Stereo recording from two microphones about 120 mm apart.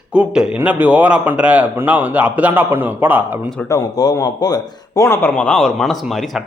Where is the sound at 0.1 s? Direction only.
10° right (ahead or behind).